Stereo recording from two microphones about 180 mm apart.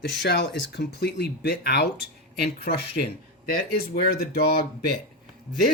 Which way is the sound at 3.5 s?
55° left (ahead or behind).